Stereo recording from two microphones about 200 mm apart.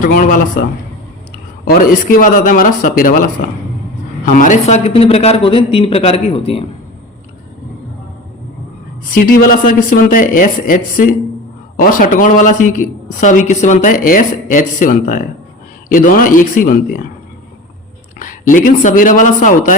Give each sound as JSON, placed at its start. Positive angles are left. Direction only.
{"t": 0.0, "sound": "a woman's voice", "side_deg": 45}
{"t": 4.3, "sound": "a man's voice", "side_deg": 40}
{"t": 9.1, "sound": "a woman's voice", "side_deg": 45}
{"t": 18.2, "sound": "speech", "side_deg": 40}